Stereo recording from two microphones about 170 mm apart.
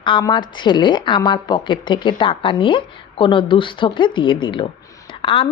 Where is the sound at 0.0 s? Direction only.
30° left (ahead or behind).